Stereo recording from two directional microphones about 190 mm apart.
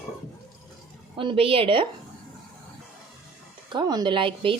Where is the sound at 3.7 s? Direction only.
20° right (ahead or behind).